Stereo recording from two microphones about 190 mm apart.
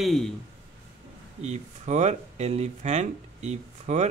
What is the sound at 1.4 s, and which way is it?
Speech, 35° right (ahead or behind).